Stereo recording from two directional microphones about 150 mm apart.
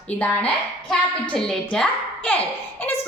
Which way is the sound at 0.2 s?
5° left (ahead or behind).